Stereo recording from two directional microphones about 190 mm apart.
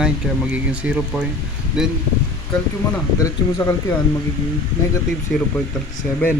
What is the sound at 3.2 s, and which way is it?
Speech, 15° left (ahead or behind).